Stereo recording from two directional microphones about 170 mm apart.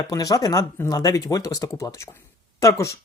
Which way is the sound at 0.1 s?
20° left (ahead or behind).